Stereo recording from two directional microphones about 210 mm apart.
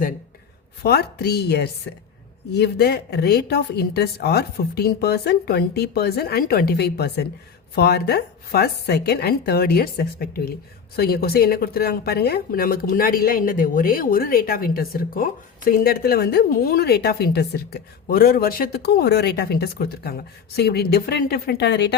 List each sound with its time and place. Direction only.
0.8 s speech: 50° left (ahead or behind)